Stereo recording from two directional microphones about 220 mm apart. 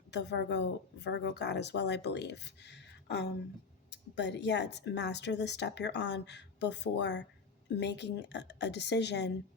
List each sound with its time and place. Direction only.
0.1 s speech: 50° left (ahead or behind)